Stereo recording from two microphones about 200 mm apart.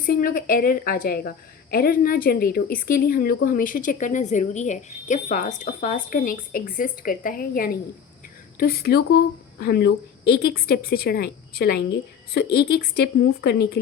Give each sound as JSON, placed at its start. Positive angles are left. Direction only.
{"t": 0.0, "sound": "a woman's voice", "side_deg": 45}